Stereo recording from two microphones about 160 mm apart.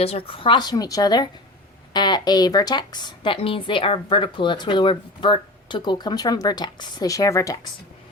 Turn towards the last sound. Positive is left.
turn(degrees=20)  # may be behind; listen again after turning